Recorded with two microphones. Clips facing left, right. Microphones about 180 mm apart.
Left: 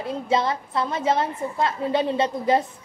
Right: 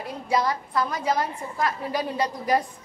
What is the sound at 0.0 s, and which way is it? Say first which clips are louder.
A woman's voice: left 2 dB; 25° left (ahead or behind).